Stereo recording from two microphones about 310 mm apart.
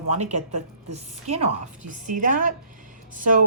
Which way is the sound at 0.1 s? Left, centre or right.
Right.